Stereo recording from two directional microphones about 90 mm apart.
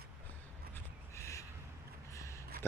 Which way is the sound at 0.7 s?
35° left (ahead or behind).